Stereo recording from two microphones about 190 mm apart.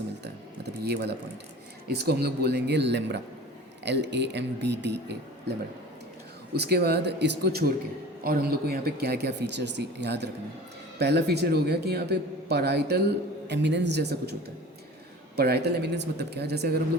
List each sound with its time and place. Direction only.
0.3 s a sound: 60° right (ahead or behind)
1.9 s a man's voice: 60° right (ahead or behind)
6.5 s a man's voice: 55° right (ahead or behind)
15.4 s a man's voice: 60° right (ahead or behind)